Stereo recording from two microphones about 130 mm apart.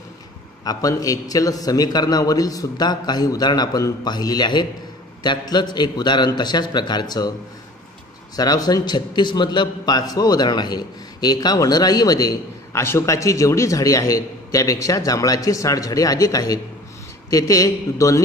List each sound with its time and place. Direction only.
0.7 s a man's voice: 25° left (ahead or behind)
8.4 s a man's voice: 30° left (ahead or behind)